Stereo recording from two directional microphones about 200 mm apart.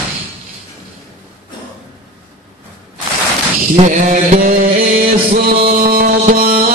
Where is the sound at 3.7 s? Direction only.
35° right (ahead or behind).